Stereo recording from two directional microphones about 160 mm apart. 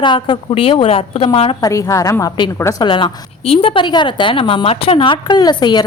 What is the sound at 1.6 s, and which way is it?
A woman's voice, 20° left (ahead or behind).